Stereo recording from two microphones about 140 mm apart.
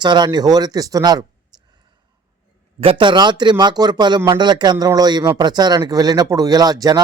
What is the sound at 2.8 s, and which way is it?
Speech, 35° right (ahead or behind).